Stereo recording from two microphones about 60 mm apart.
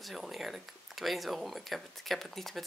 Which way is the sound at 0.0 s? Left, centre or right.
Centre.